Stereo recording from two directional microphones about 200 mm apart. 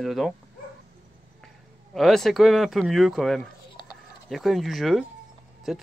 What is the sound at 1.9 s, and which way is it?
Speech, centre (ahead or behind).